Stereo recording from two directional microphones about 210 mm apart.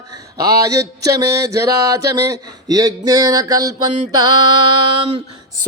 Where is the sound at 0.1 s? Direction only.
15° right (ahead or behind).